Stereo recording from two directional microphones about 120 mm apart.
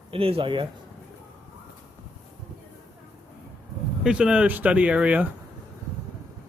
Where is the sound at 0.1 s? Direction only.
50° right (ahead or behind).